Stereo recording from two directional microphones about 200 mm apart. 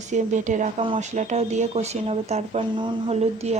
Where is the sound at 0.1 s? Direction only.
35° right (ahead or behind).